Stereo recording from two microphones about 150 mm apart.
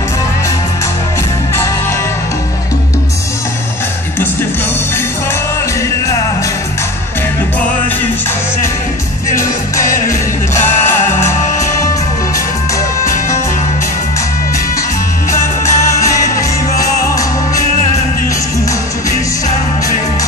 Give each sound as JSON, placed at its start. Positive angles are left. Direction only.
{"t": 9.3, "sound": "music", "side_deg": 20}
{"t": 15.3, "sound": "music", "side_deg": 20}